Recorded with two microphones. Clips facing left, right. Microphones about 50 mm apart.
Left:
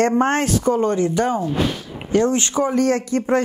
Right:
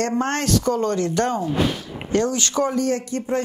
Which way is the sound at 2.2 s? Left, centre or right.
Left.